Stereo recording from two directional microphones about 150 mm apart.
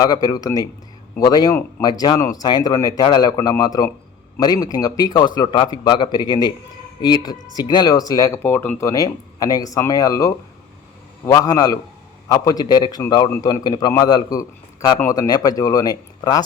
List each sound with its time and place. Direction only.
0.0 s speech: 25° left (ahead or behind)